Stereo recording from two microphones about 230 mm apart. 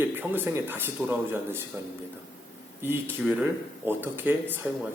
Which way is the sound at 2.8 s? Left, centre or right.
Centre.